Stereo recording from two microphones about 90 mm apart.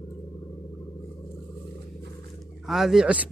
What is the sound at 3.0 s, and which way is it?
Speech, 15° right (ahead or behind).